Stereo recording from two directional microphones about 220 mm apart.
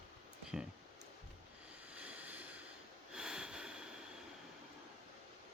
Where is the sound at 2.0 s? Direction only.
5° right (ahead or behind).